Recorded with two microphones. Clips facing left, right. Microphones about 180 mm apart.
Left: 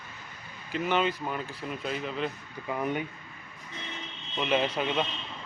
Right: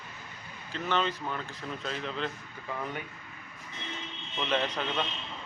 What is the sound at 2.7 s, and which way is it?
Speech, 20° left (ahead or behind).